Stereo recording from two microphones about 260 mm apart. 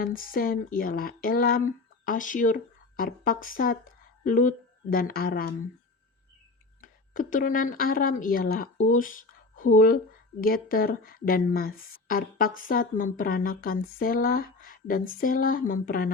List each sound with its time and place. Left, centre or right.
0.0 s a woman's voice: left
6.8 s a woman's voice: left